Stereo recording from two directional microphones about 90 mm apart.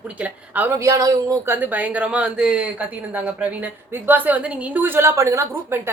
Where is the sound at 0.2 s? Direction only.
20° right (ahead or behind).